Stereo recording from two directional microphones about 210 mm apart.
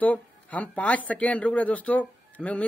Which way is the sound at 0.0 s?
5° left (ahead or behind).